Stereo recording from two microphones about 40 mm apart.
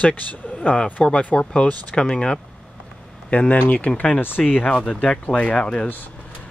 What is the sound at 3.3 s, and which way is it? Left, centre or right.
Speech, left.